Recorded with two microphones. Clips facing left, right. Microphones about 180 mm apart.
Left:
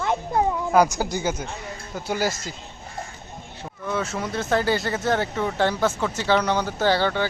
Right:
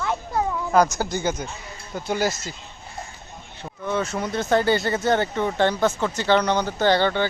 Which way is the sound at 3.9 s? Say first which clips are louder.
Right 2 dB; centre (ahead or behind).